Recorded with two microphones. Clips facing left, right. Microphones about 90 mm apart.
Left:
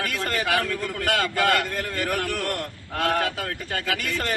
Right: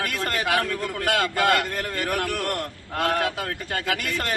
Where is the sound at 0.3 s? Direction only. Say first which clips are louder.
Even; 10° right (ahead or behind).